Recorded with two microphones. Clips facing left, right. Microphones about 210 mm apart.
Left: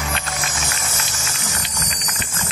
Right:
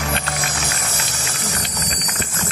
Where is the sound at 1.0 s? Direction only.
60° right (ahead or behind).